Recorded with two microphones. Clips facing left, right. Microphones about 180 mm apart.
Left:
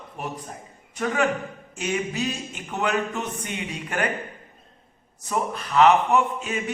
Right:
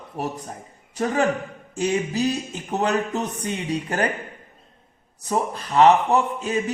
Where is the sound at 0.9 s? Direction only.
35° right (ahead or behind).